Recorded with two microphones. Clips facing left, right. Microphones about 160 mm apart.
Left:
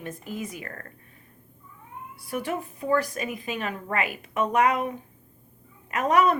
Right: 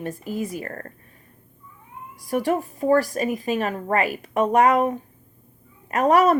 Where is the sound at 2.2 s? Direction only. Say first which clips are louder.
Right 8 dB; 40° right (ahead or behind).